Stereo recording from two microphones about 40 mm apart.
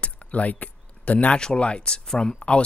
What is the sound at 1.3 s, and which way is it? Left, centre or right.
Speech, left.